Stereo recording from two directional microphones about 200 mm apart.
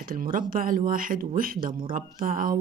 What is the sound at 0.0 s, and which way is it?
Speech, 45° right (ahead or behind).